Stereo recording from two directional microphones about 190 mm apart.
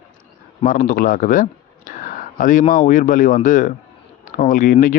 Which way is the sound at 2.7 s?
45° left (ahead or behind).